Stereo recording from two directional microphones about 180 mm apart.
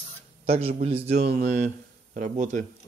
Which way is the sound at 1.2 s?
50° right (ahead or behind).